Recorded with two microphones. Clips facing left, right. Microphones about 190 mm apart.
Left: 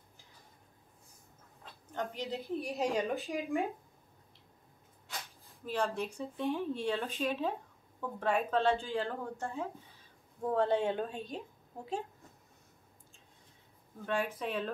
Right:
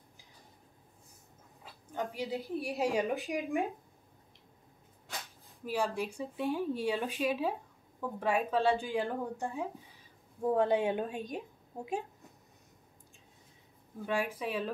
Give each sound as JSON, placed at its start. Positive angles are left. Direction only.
{"t": 1.6, "sound": "a sound", "side_deg": -10}
{"t": 2.5, "sound": "speech", "side_deg": -10}
{"t": 5.7, "sound": "speech", "side_deg": -10}
{"t": 14.0, "sound": "speech", "side_deg": -10}